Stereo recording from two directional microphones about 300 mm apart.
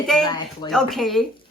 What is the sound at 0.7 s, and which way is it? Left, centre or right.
Speech, centre.